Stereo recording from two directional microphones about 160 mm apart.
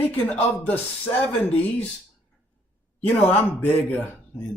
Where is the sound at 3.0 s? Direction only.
10° left (ahead or behind).